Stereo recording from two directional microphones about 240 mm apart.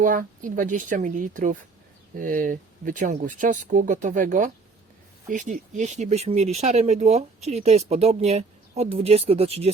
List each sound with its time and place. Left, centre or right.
0.0 s speech: right